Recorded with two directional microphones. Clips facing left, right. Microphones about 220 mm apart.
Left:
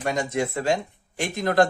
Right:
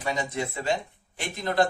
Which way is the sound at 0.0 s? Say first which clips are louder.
Left 4 dB; 45° left (ahead or behind).